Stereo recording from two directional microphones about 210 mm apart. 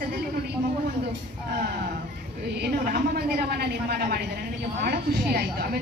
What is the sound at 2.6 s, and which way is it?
A woman's voice, 50° right (ahead or behind).